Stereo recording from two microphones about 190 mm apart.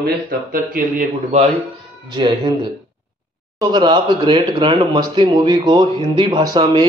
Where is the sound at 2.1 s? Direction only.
25° right (ahead or behind).